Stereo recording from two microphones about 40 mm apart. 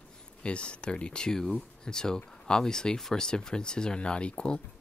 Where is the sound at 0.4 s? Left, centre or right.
Left.